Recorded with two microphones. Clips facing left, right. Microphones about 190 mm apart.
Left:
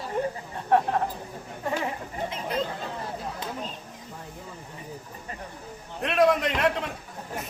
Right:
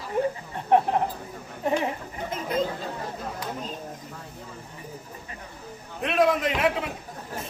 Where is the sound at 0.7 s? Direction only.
20° right (ahead or behind).